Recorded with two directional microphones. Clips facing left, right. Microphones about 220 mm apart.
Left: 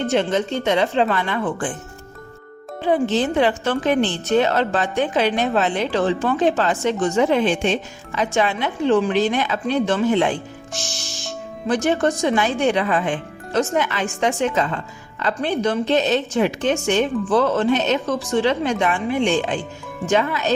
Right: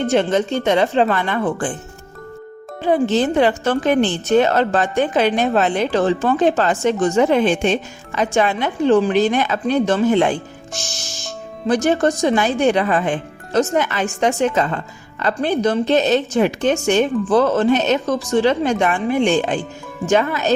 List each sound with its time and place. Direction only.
0.1 s a woman's voice: 50° right (ahead or behind)
2.8 s a woman's voice: 45° right (ahead or behind)